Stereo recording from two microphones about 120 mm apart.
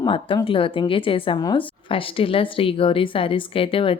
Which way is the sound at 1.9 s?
50° left (ahead or behind).